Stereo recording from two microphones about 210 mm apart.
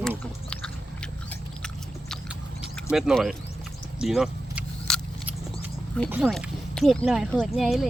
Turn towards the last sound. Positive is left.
turn(degrees=0)  # may be behind; listen again after turning